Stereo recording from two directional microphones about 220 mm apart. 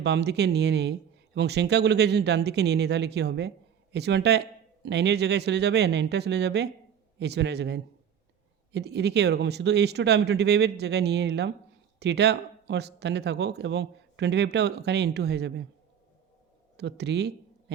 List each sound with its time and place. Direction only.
0.0 s speech: 50° right (ahead or behind)
16.7 s speech: 50° right (ahead or behind)